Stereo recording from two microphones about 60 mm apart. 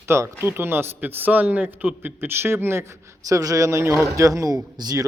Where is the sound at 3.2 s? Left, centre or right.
Right.